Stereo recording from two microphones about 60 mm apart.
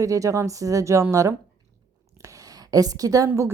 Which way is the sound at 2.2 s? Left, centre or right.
Right.